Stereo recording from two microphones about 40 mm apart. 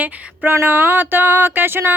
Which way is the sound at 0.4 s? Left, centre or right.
Right.